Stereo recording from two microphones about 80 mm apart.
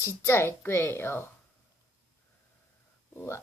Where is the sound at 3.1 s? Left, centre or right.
Left.